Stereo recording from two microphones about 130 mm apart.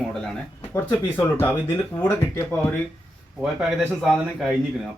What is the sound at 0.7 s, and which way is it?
Speech, 15° left (ahead or behind).